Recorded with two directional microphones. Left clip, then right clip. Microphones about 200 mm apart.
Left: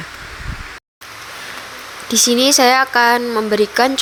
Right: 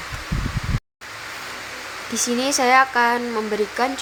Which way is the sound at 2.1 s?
25° left (ahead or behind).